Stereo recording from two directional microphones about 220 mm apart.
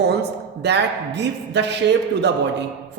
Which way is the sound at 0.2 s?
50° right (ahead or behind).